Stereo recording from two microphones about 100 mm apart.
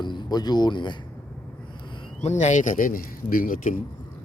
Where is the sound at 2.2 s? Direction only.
90° left.